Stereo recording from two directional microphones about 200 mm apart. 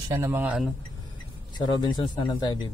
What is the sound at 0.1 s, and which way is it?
Speech, 15° right (ahead or behind).